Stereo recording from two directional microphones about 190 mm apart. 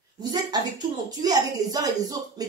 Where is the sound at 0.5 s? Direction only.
20° right (ahead or behind).